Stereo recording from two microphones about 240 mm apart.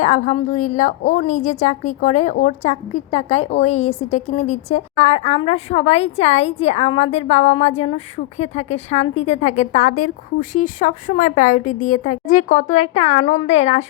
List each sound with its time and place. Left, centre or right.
0.0 s a woman's voice: left